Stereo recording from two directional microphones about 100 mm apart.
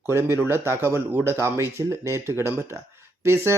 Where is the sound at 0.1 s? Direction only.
25° right (ahead or behind).